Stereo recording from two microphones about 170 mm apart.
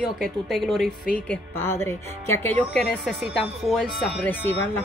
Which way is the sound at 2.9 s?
Centre (ahead or behind).